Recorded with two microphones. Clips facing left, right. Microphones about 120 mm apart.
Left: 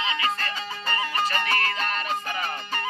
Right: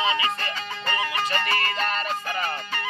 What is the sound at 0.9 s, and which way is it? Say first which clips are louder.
Music: even; centre (ahead or behind).